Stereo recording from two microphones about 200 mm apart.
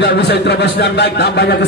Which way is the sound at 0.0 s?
55° left (ahead or behind).